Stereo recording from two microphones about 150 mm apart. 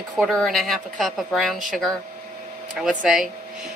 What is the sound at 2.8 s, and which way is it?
Speech, 5° right (ahead or behind).